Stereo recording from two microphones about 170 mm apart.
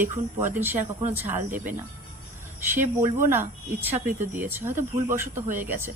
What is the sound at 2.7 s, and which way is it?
Speech, 15° right (ahead or behind).